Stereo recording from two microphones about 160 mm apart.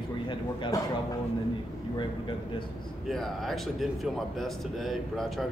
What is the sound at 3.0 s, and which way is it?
Speech, centre (ahead or behind).